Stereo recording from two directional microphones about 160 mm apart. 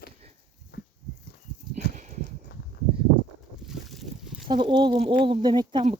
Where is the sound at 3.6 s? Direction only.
Centre (ahead or behind).